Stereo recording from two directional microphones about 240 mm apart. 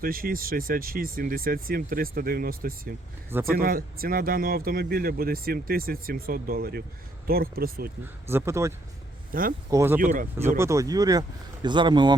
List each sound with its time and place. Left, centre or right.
0.0 s speech: right
8.0 s speech: centre
9.3 s speech: right
9.6 s speech: centre
10.0 s speech: right
10.6 s speech: centre